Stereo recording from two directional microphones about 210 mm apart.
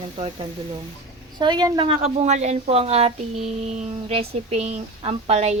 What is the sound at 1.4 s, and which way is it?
Speech, 20° right (ahead or behind).